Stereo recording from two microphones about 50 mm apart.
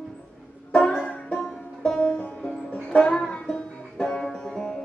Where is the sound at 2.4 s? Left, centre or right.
Centre.